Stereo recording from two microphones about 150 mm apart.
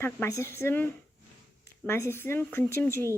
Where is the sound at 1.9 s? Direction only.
15° left (ahead or behind).